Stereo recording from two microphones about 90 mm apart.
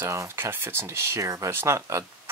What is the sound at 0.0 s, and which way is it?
Speech, 30° right (ahead or behind).